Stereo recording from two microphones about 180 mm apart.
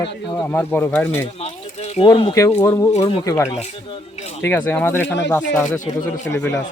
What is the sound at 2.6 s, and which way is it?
Speech, 15° left (ahead or behind).